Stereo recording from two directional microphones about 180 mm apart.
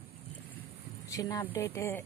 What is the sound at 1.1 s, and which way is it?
Speech, 20° left (ahead or behind).